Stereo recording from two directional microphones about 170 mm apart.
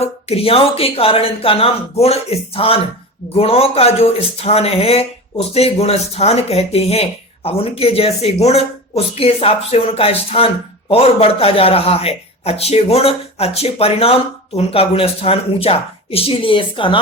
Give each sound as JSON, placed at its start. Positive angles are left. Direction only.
{"t": 0.0, "sound": "speech", "side_deg": 35}